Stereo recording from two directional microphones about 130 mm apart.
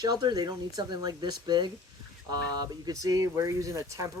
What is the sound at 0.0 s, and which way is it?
Speech, 30° right (ahead or behind).